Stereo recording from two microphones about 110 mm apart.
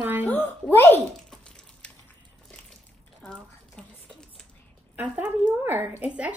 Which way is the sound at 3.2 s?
5° left (ahead or behind).